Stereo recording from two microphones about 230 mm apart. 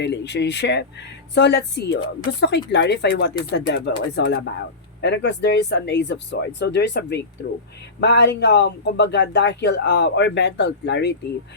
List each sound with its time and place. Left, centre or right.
0.0 s speech: left